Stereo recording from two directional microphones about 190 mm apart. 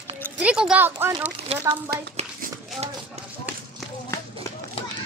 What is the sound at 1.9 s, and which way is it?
Speech, 55° right (ahead or behind).